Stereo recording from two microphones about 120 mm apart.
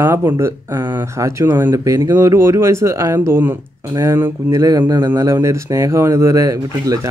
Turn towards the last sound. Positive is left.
turn(degrees=-30)  # may be behind; listen again after turning